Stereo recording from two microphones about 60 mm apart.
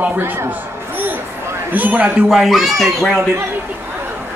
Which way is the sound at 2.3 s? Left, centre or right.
Centre.